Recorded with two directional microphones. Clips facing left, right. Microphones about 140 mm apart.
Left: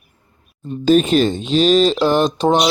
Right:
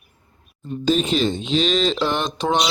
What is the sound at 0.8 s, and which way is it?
Speech, 50° left (ahead or behind).